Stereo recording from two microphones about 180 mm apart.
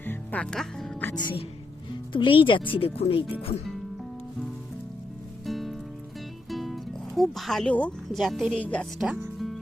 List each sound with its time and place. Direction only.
0.0 s music: 10° left (ahead or behind)
1.1 s speech: 30° left (ahead or behind)
5.5 s music: centre (ahead or behind)
7.2 s a woman's voice: centre (ahead or behind)